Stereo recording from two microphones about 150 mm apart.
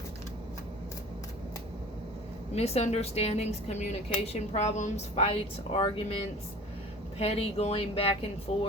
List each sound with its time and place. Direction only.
2.6 s a woman's voice: 45° left (ahead or behind)
7.2 s a woman's voice: 45° left (ahead or behind)